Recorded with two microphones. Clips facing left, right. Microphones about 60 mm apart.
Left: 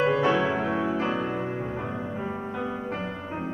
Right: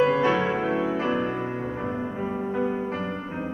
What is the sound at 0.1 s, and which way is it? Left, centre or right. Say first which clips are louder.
Music: right 1 dB; right.